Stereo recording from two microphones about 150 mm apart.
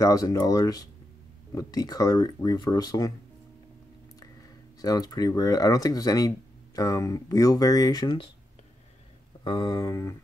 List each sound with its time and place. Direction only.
0.0 s speech: 25° left (ahead or behind)
4.8 s speech: 25° left (ahead or behind)
9.4 s speech: 30° left (ahead or behind)